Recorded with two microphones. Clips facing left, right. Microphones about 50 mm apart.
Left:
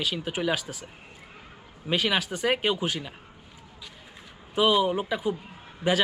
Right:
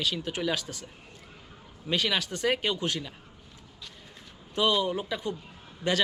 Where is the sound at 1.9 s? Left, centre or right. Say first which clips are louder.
Left 2 dB; centre.